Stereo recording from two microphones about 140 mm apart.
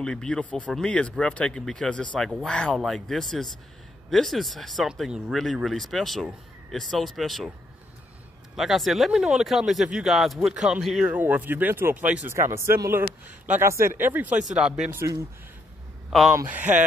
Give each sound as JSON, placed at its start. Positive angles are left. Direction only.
{"t": 0.0, "sound": "speech", "side_deg": 5}
{"t": 8.5, "sound": "speech", "side_deg": 0}
{"t": 11.1, "sound": "speech", "side_deg": -10}
{"t": 15.0, "sound": "a man's voice", "side_deg": -20}
{"t": 16.4, "sound": "speech", "side_deg": -10}